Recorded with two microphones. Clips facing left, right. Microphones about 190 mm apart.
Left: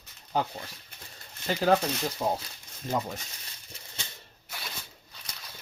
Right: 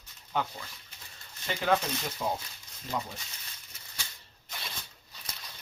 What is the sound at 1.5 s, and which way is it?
Speech, 40° left (ahead or behind).